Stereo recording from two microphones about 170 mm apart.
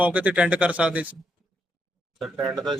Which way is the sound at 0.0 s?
10° right (ahead or behind).